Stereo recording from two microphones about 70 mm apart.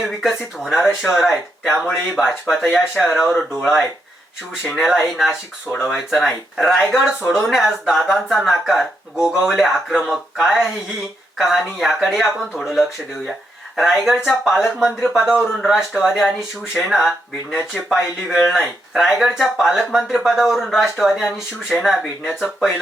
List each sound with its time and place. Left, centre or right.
0.0 s speech: centre
5.6 s speech: left
5.9 s speech: centre